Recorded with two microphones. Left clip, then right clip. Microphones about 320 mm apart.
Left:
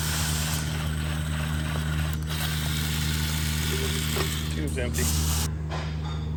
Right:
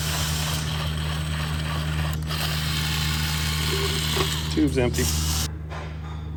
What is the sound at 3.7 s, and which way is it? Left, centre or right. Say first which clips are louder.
Ratchet: right 4 dB; right.